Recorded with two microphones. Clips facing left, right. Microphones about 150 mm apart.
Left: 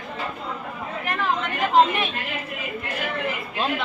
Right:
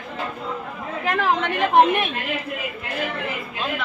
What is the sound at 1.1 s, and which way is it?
Chatter, 85° right.